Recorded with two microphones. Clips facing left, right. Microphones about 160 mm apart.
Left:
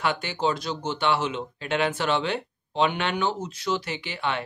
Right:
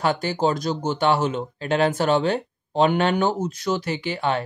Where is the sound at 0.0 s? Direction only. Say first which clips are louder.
Right 4 dB; 40° right (ahead or behind).